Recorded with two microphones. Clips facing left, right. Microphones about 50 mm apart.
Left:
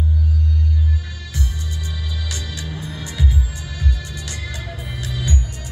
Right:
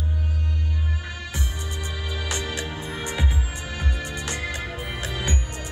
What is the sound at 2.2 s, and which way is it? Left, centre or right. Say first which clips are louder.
Music: right 2 dB; right.